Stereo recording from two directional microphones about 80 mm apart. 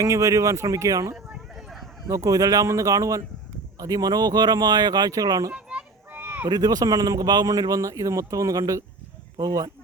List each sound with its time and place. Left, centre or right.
0.0 s speech: right
5.5 s children playing: centre
6.1 s a sound: right
6.5 s speech: right